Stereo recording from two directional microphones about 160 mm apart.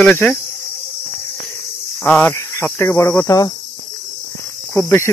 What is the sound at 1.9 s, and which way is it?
Speech, 10° left (ahead or behind).